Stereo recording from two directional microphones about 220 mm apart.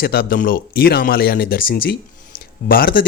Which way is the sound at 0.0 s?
45° left (ahead or behind).